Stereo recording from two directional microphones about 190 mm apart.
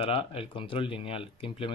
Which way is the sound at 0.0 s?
30° left (ahead or behind).